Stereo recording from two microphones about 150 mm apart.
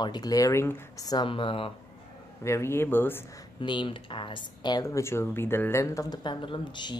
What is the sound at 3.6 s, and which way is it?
Speech, 35° left (ahead or behind).